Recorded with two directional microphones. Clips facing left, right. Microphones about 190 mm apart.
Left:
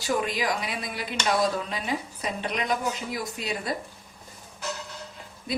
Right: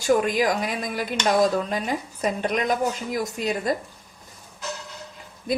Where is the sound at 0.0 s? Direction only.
45° right (ahead or behind).